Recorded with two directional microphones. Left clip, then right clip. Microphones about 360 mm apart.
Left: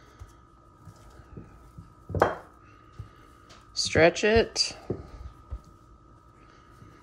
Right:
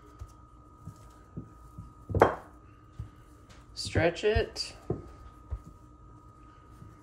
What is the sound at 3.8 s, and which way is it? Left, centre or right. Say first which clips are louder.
Speech: left 6 dB; centre.